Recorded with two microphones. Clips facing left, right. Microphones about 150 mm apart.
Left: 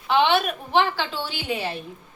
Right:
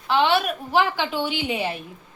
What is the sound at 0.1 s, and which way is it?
Speech, centre (ahead or behind).